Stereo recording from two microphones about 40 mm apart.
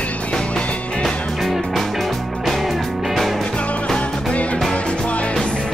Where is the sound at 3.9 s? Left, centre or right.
Left.